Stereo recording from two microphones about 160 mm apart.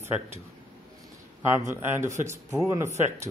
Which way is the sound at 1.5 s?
15° right (ahead or behind).